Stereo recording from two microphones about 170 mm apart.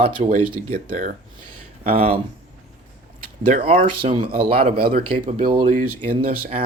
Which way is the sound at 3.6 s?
35° right (ahead or behind).